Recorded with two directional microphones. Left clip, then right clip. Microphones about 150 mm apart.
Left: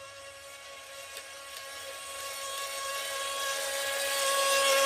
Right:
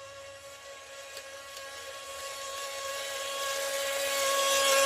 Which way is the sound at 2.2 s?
45° left (ahead or behind).